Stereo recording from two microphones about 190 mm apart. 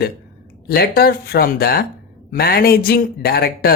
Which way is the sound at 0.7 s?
55° left (ahead or behind).